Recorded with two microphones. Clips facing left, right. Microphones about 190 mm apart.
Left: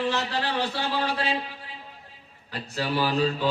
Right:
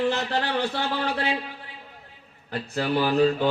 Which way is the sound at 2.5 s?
50° right (ahead or behind).